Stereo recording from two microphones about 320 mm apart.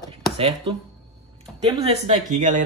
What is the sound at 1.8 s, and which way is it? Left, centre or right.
Speech, right.